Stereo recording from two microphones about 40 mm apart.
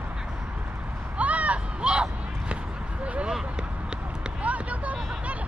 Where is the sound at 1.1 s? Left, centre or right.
Right.